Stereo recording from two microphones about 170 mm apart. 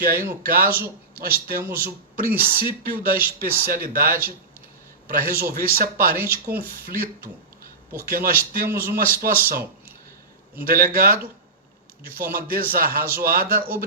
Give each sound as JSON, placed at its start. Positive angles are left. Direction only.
{"t": 0.0, "sound": "speech", "side_deg": -60}
{"t": 10.7, "sound": "speech", "side_deg": -60}